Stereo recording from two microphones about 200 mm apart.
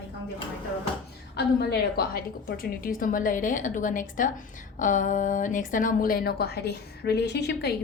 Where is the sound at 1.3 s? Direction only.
50° left (ahead or behind).